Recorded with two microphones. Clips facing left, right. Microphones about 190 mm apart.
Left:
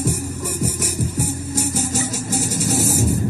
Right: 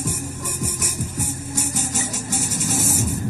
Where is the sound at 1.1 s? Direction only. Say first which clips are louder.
Left 5 dB; 40° left (ahead or behind).